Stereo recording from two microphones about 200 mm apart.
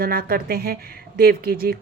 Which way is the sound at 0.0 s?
50° right (ahead or behind).